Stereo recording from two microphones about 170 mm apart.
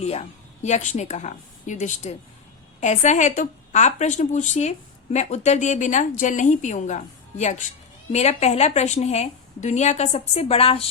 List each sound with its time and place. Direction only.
0.0 s a woman's voice: 40° left (ahead or behind)